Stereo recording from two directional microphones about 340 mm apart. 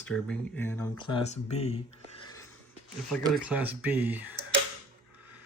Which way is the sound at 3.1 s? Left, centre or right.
Centre.